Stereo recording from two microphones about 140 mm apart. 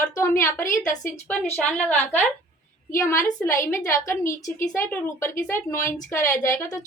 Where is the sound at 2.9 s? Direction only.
20° left (ahead or behind).